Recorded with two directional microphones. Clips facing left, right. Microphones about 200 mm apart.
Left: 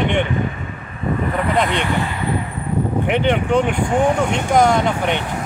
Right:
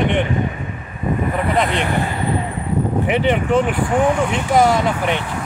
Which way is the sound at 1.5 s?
Centre (ahead or behind).